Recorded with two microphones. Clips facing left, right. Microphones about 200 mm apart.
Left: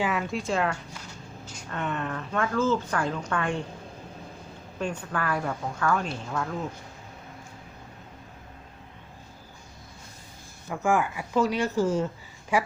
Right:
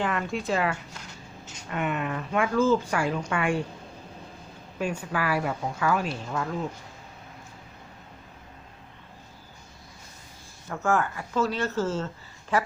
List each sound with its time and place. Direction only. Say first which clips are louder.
0.0 s a woman's voice: even; 5° left (ahead or behind)
4.8 s a woman's voice: right 2 dB; 10° right (ahead or behind)
10.7 s a woman's voice: left 1 dB; 10° left (ahead or behind)